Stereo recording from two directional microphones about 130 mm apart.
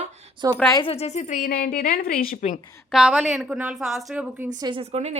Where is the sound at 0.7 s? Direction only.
40° left (ahead or behind).